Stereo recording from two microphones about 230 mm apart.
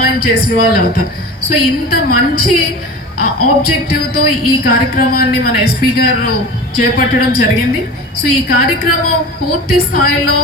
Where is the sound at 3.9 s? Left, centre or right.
Left.